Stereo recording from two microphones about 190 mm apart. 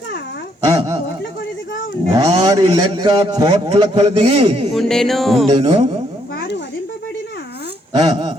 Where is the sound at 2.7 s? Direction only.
20° right (ahead or behind).